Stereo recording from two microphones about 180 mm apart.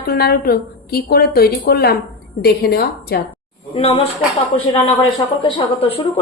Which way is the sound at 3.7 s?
35° left (ahead or behind).